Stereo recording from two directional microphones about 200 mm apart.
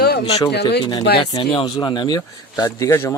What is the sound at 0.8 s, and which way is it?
Speech, 20° left (ahead or behind).